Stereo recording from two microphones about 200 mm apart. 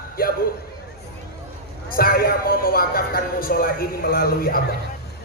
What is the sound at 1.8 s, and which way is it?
A man's voice, 45° left (ahead or behind).